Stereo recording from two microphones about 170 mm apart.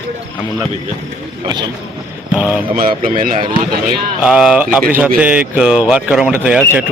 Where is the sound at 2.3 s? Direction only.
10° right (ahead or behind).